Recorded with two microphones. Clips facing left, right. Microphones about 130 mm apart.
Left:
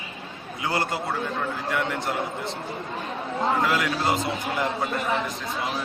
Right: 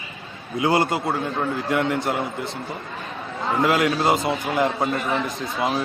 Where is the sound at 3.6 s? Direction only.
15° right (ahead or behind).